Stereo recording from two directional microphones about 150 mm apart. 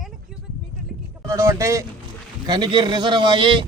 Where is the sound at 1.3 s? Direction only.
20° right (ahead or behind).